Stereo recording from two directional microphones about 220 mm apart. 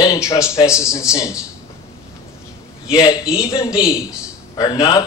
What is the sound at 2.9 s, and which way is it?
Speech, 15° left (ahead or behind).